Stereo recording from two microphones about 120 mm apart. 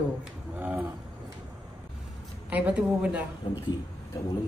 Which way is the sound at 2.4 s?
10° right (ahead or behind).